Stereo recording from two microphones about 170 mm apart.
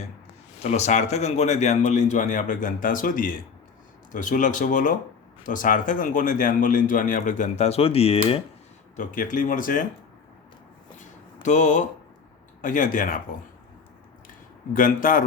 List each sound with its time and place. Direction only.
0.6 s speech: 40° left (ahead or behind)
9.0 s speech: 50° left (ahead or behind)
11.4 s speech: 45° left (ahead or behind)
14.7 s speech: 50° left (ahead or behind)